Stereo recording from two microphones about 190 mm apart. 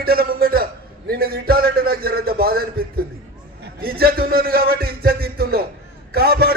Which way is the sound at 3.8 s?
50° right (ahead or behind).